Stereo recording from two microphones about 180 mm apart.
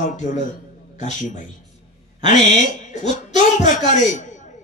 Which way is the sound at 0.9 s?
40° left (ahead or behind).